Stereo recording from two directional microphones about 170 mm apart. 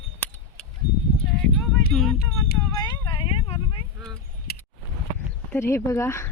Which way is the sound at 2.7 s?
25° left (ahead or behind).